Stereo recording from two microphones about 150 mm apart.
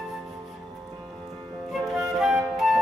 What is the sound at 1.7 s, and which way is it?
Flute, centre (ahead or behind).